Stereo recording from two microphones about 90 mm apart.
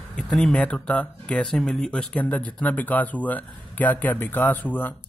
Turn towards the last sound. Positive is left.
turn(degrees=20)  # may be behind; listen again after turning